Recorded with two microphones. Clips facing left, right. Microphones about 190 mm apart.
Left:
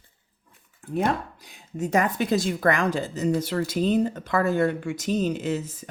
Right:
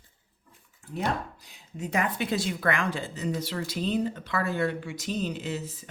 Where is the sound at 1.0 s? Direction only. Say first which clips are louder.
Left 5 dB; 50° left (ahead or behind).